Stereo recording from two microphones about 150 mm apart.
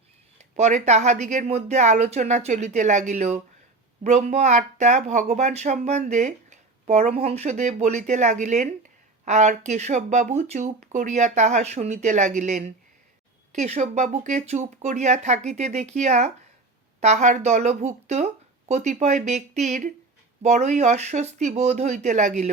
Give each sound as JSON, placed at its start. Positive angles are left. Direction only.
{"t": 0.5, "sound": "speech", "side_deg": -50}